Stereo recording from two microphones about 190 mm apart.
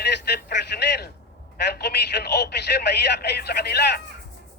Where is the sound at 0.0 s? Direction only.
60° left (ahead or behind).